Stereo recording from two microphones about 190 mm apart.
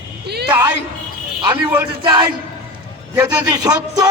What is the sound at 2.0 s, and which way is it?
A man's voice, 25° right (ahead or behind).